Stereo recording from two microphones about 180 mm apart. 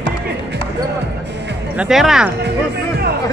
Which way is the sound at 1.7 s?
Centre (ahead or behind).